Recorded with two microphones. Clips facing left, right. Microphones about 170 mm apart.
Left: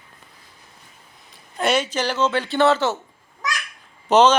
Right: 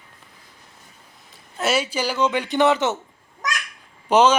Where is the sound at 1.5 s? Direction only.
5° right (ahead or behind).